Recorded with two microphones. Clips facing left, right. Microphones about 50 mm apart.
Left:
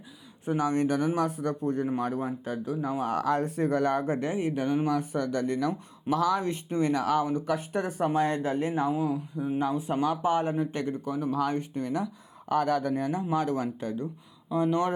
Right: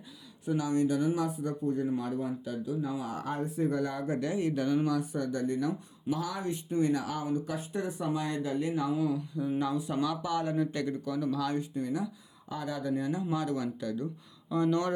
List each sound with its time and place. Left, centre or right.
0.4 s speech: left
3.2 s speech: left
4.0 s speech: left
5.1 s speech: left
11.8 s speech: left
14.5 s speech: centre